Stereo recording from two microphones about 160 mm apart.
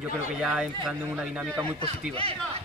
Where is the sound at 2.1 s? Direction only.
35° right (ahead or behind).